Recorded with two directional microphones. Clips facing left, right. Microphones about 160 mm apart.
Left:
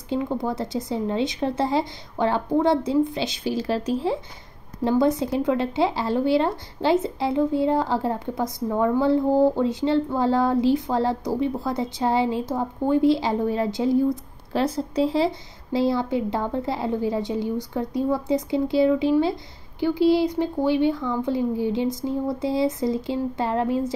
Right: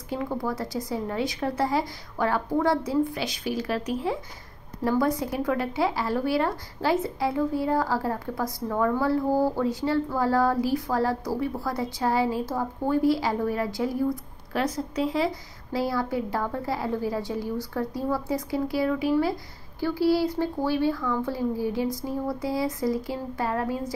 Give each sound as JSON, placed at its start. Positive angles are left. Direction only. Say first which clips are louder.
{"t": 0.1, "sound": "speech", "louder": "left 4 dB", "side_deg": 20}